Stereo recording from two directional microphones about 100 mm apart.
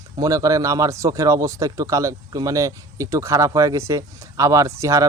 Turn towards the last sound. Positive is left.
turn(degrees=-30)  # may be behind; listen again after turning